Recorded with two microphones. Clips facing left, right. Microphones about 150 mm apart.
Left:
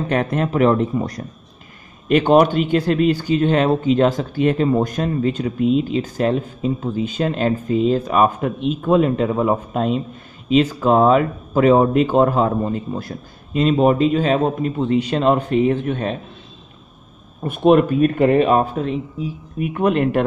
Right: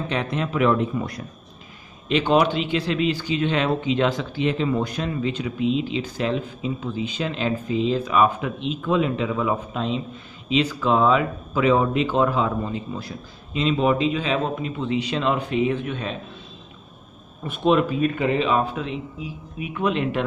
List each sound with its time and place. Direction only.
0.1 s a man's voice: 50° left (ahead or behind)
17.4 s a man's voice: 50° left (ahead or behind)